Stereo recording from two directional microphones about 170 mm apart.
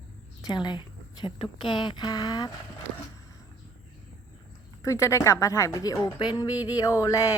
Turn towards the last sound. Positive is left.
turn(degrees=20)  # may be behind; listen again after turning